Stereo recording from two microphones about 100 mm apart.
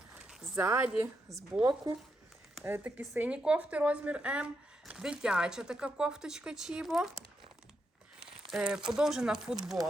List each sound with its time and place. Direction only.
0.1 s a sound: 10° right (ahead or behind)
0.5 s speech: 20° right (ahead or behind)
1.6 s speech: 35° right (ahead or behind)
2.6 s speech: 20° right (ahead or behind)
3.2 s speech: 10° right (ahead or behind)
8.2 s speech: 10° right (ahead or behind)